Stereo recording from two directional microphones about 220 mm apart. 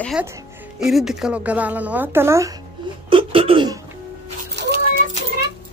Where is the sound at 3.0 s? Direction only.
25° right (ahead or behind).